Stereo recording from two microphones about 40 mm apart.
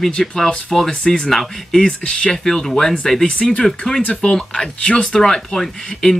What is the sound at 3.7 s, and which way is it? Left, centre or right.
Speech, centre.